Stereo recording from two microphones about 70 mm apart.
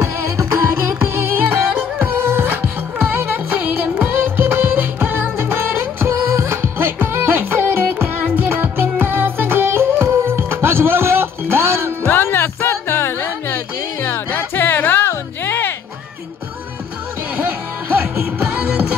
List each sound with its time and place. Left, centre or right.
0.9 s music: right
12.1 s music: left
18.5 s music: centre